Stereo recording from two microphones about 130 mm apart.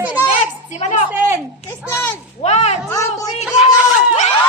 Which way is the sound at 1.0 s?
20° right (ahead or behind).